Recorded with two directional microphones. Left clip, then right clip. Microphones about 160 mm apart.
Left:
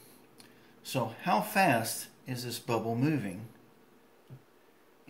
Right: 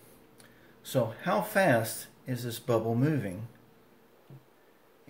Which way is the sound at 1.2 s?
35° right (ahead or behind).